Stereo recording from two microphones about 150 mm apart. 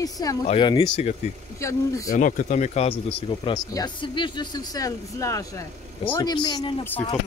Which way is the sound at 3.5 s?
30° left (ahead or behind).